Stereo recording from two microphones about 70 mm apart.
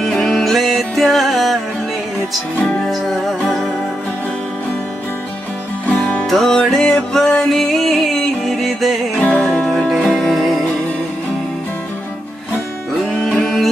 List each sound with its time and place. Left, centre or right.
0.0 s music: centre
2.6 s music: centre
5.9 s music: centre
6.2 s music: centre
9.2 s music: centre
9.7 s music: centre
13.4 s music: centre